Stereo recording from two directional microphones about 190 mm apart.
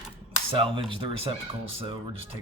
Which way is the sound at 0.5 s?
25° right (ahead or behind).